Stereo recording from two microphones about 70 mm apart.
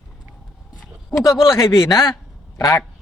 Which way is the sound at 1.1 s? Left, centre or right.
Left.